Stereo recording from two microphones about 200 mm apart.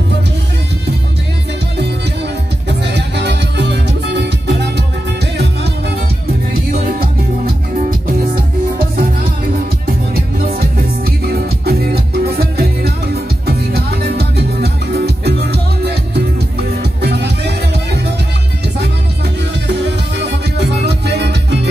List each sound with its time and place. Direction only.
2.8 s music: 60° right (ahead or behind)
6.8 s music: 50° right (ahead or behind)
9.8 s music: 45° right (ahead or behind)
19.7 s music: 60° right (ahead or behind)